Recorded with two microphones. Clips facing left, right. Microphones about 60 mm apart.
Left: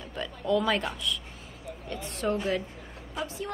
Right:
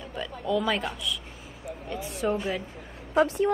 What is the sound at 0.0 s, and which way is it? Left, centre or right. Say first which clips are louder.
Oink: right 1 dB; centre.